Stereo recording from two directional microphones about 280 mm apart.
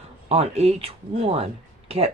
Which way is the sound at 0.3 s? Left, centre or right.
Right.